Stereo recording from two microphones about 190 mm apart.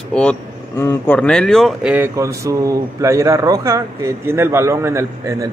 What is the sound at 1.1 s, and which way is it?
Speech, 5° left (ahead or behind).